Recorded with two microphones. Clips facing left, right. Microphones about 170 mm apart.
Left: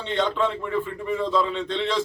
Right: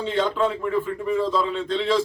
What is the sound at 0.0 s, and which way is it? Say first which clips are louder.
A man's voice: right 2 dB; 5° right (ahead or behind).